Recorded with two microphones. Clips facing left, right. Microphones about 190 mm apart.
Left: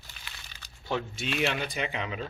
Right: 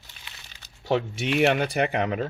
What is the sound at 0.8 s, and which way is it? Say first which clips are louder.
Speech: right 7 dB; 70° right (ahead or behind).